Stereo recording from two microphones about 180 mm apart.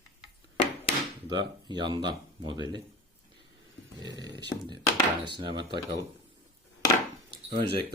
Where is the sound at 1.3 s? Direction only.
25° right (ahead or behind).